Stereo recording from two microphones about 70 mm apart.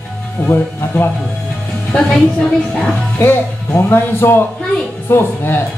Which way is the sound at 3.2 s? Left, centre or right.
Left.